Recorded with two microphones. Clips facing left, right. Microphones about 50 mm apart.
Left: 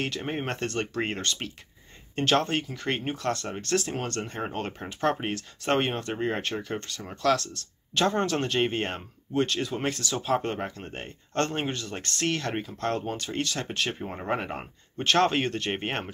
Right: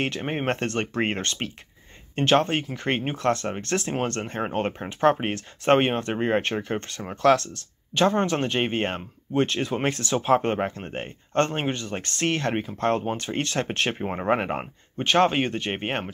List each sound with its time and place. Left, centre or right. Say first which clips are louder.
0.0 s speech: right 4 dB; right
2.1 s speech: right 4 dB; right
7.9 s speech: right 3 dB; centre; by 14.7 s right
15.0 s speech: right 3 dB; centre